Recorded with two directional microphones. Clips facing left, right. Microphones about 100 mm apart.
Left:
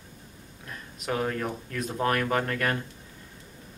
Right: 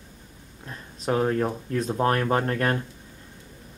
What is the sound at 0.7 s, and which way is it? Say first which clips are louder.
Speech: right 5 dB; 30° right (ahead or behind).